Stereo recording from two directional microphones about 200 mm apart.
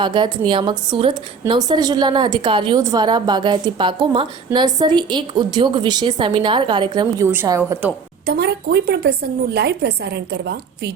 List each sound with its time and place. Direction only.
0.0 s a woman's voice: 25° right (ahead or behind)
8.3 s a woman's voice: 55° right (ahead or behind)